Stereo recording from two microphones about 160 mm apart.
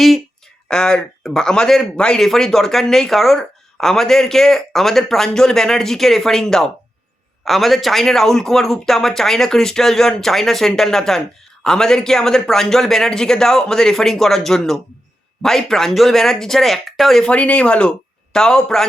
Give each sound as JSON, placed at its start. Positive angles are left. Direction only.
{"t": 0.7, "sound": "speech", "side_deg": 5}